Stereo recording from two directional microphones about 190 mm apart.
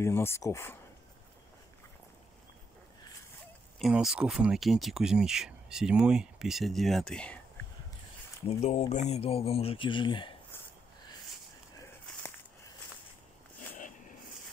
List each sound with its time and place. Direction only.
0.0 s speech: 15° left (ahead or behind)
3.8 s speech: 5° right (ahead or behind)
8.5 s speech: 35° left (ahead or behind)
13.7 s a sound: 45° left (ahead or behind)